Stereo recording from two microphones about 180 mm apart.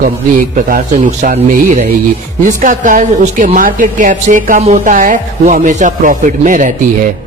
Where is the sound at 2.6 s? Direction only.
45° right (ahead or behind).